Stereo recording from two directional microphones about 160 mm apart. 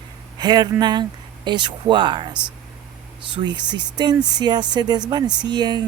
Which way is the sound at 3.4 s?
30° right (ahead or behind).